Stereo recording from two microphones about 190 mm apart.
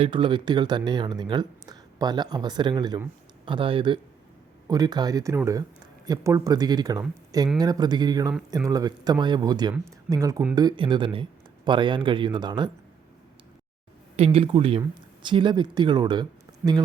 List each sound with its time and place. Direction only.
0.0 s speech: 25° right (ahead or behind)
14.3 s speech: 30° right (ahead or behind)